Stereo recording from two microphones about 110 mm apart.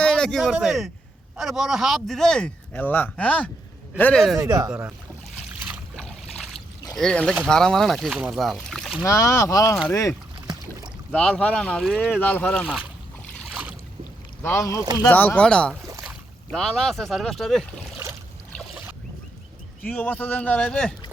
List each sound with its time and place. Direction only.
0.0 s a man's voice: 5° left (ahead or behind)
4.4 s speech: 35° right (ahead or behind)
5.5 s boat: 15° right (ahead or behind)
6.0 s a sound: 5° left (ahead or behind)
6.9 s a man's voice: 5° left (ahead or behind)
9.0 s speech: 25° left (ahead or behind)
10.4 s boat: 40° right (ahead or behind)
11.1 s speech: 5° left (ahead or behind)
12.6 s speech: 10° right (ahead or behind)
13.5 s boat: 10° right (ahead or behind)
14.4 s speech: 25° left (ahead or behind)
15.0 s a man's voice: 15° left (ahead or behind)
19.8 s speech: 15° left (ahead or behind)